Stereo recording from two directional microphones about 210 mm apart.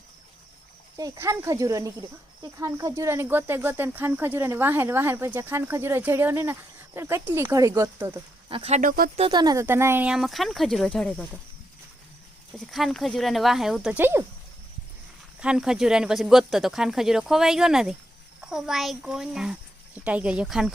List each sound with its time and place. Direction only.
0.9 s speech: 15° right (ahead or behind)
8.4 s speech: 25° right (ahead or behind)
9.2 s speech: 20° right (ahead or behind); by 11.3 s 5° left (ahead or behind)
12.5 s speech: centre (ahead or behind)
15.4 s speech: 5° right (ahead or behind)